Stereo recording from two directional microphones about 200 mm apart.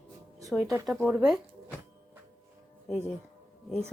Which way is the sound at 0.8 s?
Centre (ahead or behind).